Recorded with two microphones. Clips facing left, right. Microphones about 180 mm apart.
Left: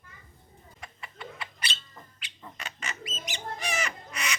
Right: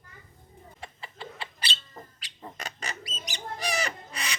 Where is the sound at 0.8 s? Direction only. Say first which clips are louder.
Right 1 dB; 30° right (ahead or behind).